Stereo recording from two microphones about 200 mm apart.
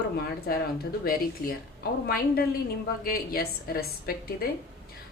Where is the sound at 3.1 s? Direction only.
50° left (ahead or behind).